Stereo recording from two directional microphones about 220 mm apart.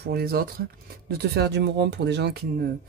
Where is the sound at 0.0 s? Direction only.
45° right (ahead or behind).